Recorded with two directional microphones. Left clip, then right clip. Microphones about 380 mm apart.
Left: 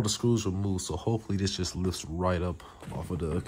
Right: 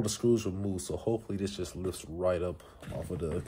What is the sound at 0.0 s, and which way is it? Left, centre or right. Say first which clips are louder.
Speech: even; left.